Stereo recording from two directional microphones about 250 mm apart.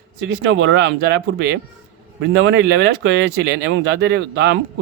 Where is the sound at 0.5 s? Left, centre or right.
Right.